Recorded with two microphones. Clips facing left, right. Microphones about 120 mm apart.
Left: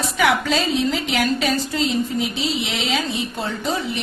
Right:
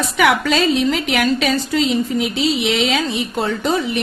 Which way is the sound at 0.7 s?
70° right (ahead or behind).